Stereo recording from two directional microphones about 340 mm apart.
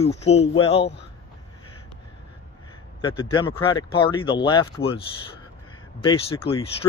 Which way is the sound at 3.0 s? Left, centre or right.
Centre.